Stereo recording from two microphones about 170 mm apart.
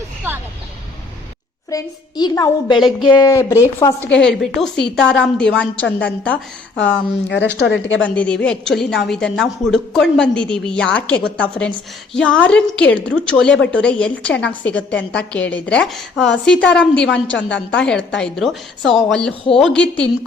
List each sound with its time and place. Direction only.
1.7 s a child's voice: 25° left (ahead or behind)
2.7 s a woman's voice: centre (ahead or behind)
3.1 s a woman's voice: 20° left (ahead or behind)
4.1 s a woman's voice: 5° left (ahead or behind)
7.6 s a woman's voice: 90° left
8.0 s a woman's voice: 10° left (ahead or behind)